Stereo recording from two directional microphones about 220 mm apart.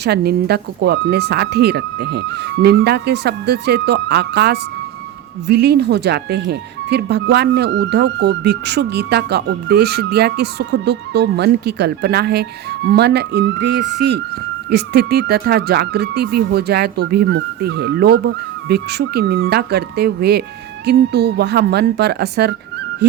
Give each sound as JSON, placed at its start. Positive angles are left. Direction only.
{"t": 0.0, "sound": "speech", "side_deg": -45}